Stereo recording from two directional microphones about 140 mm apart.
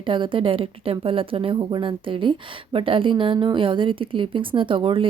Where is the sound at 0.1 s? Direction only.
35° right (ahead or behind).